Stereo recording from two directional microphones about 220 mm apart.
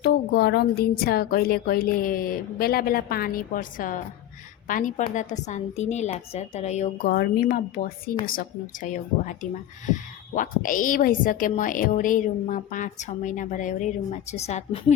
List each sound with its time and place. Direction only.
0.0 s a woman's voice: 45° left (ahead or behind)
7.1 s a woman's voice: 45° left (ahead or behind)